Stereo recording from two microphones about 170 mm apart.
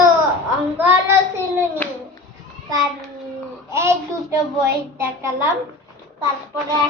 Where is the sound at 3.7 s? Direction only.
15° right (ahead or behind).